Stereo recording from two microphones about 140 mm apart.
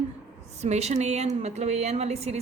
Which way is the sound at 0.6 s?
50° right (ahead or behind).